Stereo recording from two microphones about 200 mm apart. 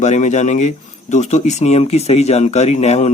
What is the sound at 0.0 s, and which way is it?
Speech, 35° left (ahead or behind).